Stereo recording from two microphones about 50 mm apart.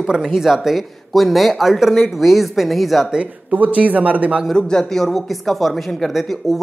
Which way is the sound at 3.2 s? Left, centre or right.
Right.